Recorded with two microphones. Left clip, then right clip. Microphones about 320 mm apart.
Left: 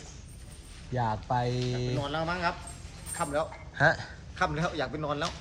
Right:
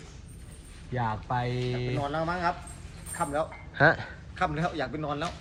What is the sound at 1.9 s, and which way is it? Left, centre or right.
A man's voice, centre.